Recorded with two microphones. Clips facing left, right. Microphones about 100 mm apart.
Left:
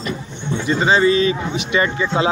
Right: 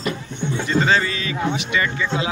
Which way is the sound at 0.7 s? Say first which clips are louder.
Left 5 dB; 20° left (ahead or behind).